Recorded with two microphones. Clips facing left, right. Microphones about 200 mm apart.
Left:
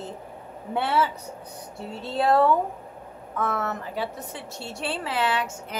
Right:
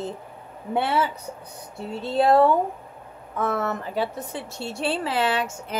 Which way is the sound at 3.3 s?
30° right (ahead or behind).